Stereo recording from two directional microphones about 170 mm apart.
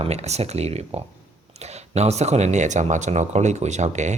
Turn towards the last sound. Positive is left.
turn(degrees=-45)  # may be behind; listen again after turning